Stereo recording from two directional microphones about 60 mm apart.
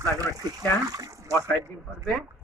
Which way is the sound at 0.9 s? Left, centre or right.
Right.